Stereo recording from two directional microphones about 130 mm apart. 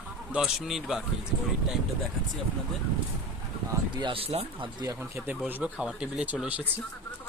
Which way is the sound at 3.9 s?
35° right (ahead or behind).